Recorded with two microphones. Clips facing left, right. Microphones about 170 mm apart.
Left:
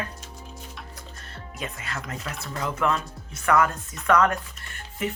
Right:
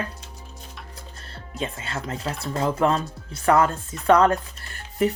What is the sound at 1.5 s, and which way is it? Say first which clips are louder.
Speech: right 5 dB; 30° right (ahead or behind).